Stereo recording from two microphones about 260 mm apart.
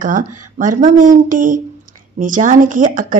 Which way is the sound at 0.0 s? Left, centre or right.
Right.